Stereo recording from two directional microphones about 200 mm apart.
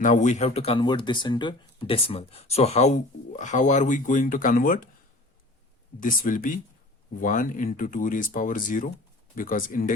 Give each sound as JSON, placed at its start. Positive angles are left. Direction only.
{"t": 0.0, "sound": "speech", "side_deg": 40}
{"t": 6.0, "sound": "speech", "side_deg": 40}